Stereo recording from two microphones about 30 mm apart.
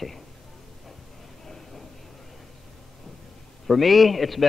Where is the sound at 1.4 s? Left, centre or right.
Centre.